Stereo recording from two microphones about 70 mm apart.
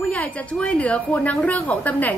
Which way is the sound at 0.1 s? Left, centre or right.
Centre.